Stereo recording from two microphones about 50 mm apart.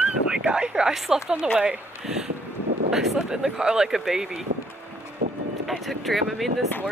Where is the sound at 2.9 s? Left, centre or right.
Centre.